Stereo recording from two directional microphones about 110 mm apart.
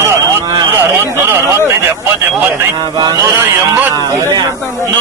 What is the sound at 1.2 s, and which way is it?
Speech, 20° right (ahead or behind).